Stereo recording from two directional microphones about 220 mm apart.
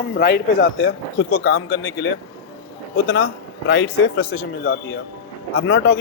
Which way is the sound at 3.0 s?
50° left (ahead or behind).